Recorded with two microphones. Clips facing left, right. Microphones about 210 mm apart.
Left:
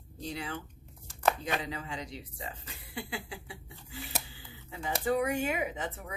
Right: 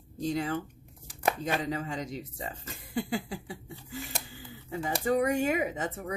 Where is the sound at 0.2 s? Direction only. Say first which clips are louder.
Right 8 dB; 45° right (ahead or behind).